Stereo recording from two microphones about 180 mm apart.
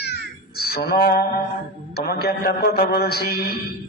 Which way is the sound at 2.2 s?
60° left (ahead or behind).